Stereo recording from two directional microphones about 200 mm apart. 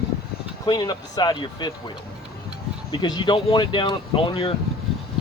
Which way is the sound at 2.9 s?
20° left (ahead or behind).